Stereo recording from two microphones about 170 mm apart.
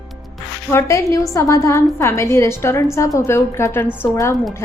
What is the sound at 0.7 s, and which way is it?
A woman's voice, 15° left (ahead or behind).